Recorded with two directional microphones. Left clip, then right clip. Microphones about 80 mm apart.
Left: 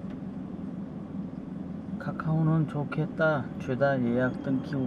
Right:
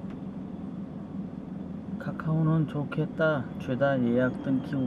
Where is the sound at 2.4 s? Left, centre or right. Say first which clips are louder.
Even; centre.